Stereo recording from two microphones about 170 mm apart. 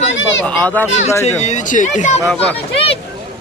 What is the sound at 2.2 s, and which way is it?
Speech, 5° left (ahead or behind).